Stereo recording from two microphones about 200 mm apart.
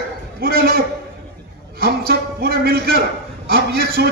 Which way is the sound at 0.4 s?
50° right (ahead or behind).